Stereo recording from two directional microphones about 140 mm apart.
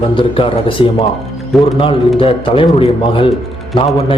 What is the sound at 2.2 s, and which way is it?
Speech, 40° left (ahead or behind).